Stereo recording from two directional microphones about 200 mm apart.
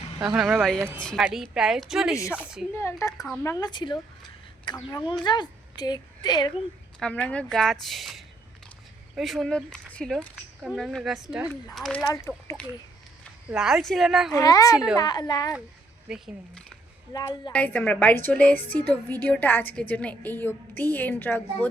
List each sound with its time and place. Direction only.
0.3 s speech: centre (ahead or behind)
2.1 s a woman's voice: 15° left (ahead or behind)
2.4 s speech: 5° right (ahead or behind)
2.7 s a woman's voice: 15° left (ahead or behind)
3.2 s speech: centre (ahead or behind)
3.4 s a woman's voice: 15° left (ahead or behind)
7.0 s speech: 5° left (ahead or behind)
13.5 s speech: centre (ahead or behind)
14.3 s a woman's voice: 15° left (ahead or behind)
16.0 s speech: centre (ahead or behind)
17.1 s a woman's voice: 20° left (ahead or behind)
17.5 s a woman's voice: 5° left (ahead or behind)